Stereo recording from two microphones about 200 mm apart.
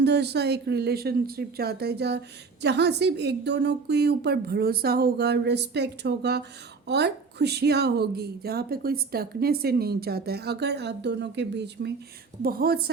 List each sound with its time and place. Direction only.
0.0 s speech: 55° right (ahead or behind)